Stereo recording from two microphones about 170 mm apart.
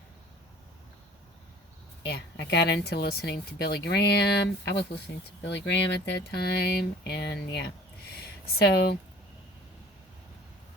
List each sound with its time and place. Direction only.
2.0 s speech: 75° left (ahead or behind)
5.5 s speech: 90° left; by 9.0 s 70° left (ahead or behind)